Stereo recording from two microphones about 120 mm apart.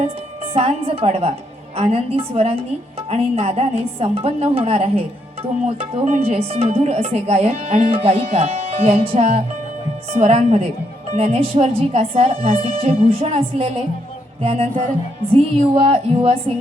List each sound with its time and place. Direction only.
0.5 s a woman's voice: 55° right (ahead or behind)